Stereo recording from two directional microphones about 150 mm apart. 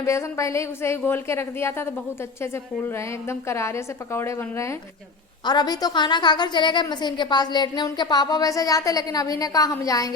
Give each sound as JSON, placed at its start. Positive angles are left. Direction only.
{"t": 0.0, "sound": "speech", "side_deg": 20}
{"t": 2.9, "sound": "a woman's voice", "side_deg": 15}